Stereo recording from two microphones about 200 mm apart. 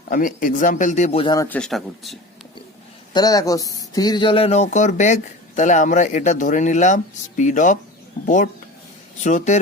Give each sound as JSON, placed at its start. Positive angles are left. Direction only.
{"t": 0.1, "sound": "speech", "side_deg": 40}
{"t": 1.5, "sound": "speech", "side_deg": 5}
{"t": 3.1, "sound": "speech", "side_deg": 20}
{"t": 8.2, "sound": "speech", "side_deg": 50}
{"t": 9.2, "sound": "speech", "side_deg": 35}